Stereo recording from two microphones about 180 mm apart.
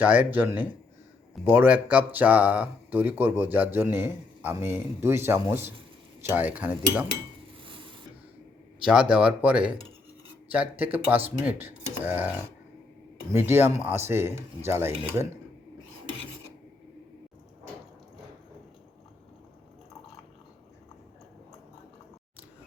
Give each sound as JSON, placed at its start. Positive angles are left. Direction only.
{"t": 0.0, "sound": "speech", "side_deg": -10}
{"t": 7.6, "sound": "dishes", "side_deg": -30}
{"t": 8.8, "sound": "speech", "side_deg": -5}
{"t": 13.3, "sound": "speech", "side_deg": -15}